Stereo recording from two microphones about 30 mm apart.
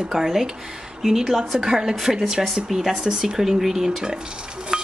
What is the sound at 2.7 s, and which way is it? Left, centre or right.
Speech, centre.